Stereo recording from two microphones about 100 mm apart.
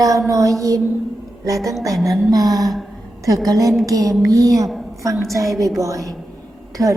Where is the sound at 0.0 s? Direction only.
35° right (ahead or behind).